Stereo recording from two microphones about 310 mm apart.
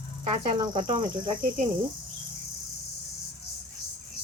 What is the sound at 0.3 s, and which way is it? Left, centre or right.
Speech, centre.